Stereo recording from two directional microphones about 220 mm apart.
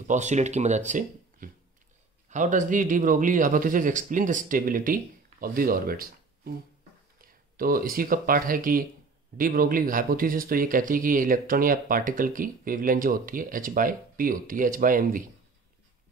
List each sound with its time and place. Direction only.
0.0 s speech: 35° right (ahead or behind)